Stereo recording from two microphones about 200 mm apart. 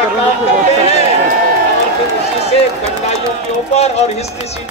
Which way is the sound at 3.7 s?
35° left (ahead or behind).